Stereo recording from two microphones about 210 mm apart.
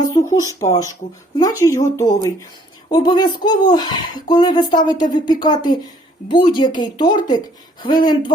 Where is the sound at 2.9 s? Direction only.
20° left (ahead or behind).